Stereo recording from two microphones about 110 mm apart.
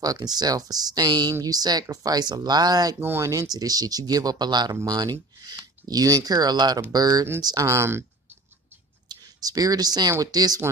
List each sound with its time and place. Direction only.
0.0 s speech: 35° right (ahead or behind)
3.0 s speech: 25° right (ahead or behind)
9.1 s speech: 35° right (ahead or behind)